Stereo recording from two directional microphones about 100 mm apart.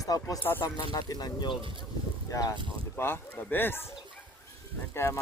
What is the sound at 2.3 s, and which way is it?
Speech, 35° left (ahead or behind).